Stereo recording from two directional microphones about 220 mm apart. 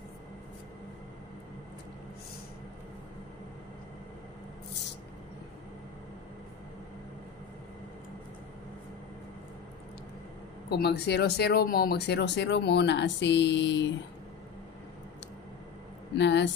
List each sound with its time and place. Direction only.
10.7 s speech: 50° left (ahead or behind)
16.2 s speech: 55° left (ahead or behind)